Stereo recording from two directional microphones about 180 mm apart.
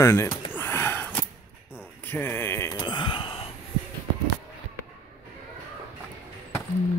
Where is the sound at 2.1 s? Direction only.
10° left (ahead or behind); by 3.5 s 30° left (ahead or behind).